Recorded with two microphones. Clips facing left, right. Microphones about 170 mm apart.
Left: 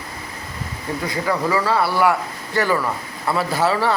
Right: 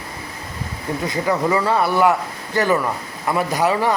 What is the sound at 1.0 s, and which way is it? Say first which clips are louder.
A man's voice: right 2 dB; 20° right (ahead or behind).